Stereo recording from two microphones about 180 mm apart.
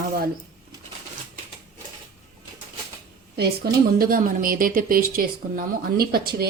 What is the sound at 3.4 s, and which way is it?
A woman's voice, 55° right (ahead or behind).